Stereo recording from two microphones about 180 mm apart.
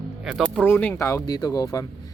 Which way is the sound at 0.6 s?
10° left (ahead or behind).